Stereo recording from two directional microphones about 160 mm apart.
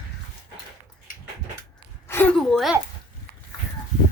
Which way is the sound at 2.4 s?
5° left (ahead or behind).